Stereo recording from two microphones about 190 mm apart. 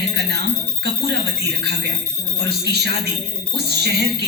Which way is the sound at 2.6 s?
60° right (ahead or behind).